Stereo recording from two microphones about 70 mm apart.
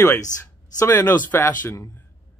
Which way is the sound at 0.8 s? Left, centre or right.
Left.